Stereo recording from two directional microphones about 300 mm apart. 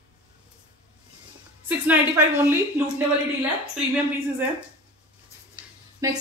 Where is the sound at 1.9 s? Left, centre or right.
Centre.